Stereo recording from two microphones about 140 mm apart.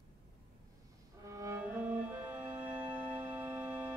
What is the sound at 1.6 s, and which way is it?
Music, 10° right (ahead or behind).